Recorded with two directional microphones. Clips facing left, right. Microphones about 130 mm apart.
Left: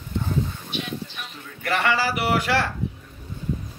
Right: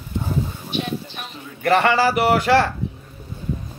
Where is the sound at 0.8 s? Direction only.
40° right (ahead or behind).